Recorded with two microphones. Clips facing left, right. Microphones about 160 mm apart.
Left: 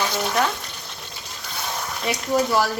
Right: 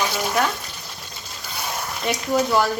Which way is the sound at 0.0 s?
10° right (ahead or behind).